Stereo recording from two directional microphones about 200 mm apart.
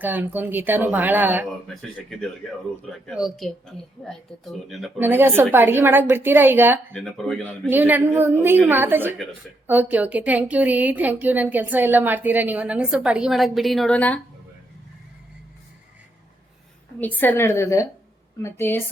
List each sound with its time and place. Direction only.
0.0 s a woman's voice: 10° right (ahead or behind)
1.6 s a woman's voice: 5° left (ahead or behind)
6.9 s speech: 5° left (ahead or behind)
7.7 s a woman's voice: 10° right (ahead or behind); by 14.2 s 5° left (ahead or behind)
17.0 s a woman's voice: 10° left (ahead or behind)